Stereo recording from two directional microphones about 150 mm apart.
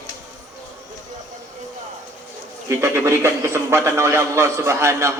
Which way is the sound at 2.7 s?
20° right (ahead or behind).